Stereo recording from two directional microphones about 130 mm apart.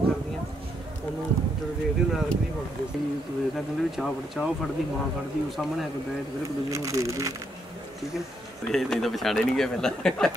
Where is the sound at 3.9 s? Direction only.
Centre (ahead or behind).